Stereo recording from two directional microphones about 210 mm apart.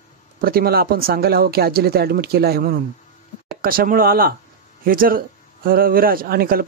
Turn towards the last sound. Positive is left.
turn(degrees=-45)  # may be behind; listen again after turning